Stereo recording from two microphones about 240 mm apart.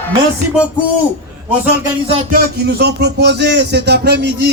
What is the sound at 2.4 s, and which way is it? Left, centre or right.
Speech, right.